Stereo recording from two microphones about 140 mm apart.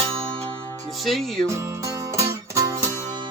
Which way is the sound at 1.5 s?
20° right (ahead or behind).